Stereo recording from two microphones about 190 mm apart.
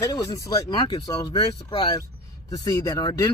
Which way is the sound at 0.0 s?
20° left (ahead or behind).